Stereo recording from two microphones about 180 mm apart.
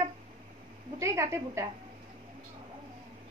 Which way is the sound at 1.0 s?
15° right (ahead or behind).